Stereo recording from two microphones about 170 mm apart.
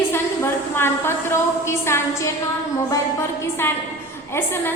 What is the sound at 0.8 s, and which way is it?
A woman's voice, 15° left (ahead or behind).